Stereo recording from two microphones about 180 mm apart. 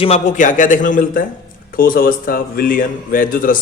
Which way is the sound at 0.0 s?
40° left (ahead or behind).